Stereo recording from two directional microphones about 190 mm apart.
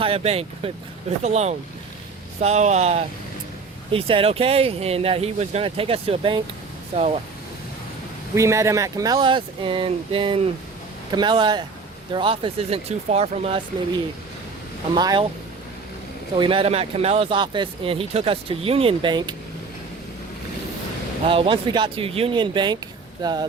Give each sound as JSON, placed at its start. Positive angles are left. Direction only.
{"t": 0.0, "sound": "speech", "side_deg": -30}
{"t": 8.4, "sound": "speech", "side_deg": -15}
{"t": 14.9, "sound": "speech", "side_deg": -20}
{"t": 16.4, "sound": "speech", "side_deg": -30}
{"t": 21.2, "sound": "speech", "side_deg": -30}